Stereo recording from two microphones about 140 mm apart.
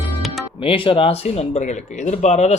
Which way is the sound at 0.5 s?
40° left (ahead or behind).